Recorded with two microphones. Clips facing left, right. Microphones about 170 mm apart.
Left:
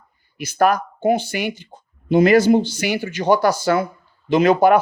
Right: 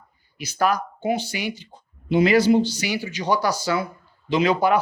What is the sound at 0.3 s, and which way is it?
Speech, 50° left (ahead or behind).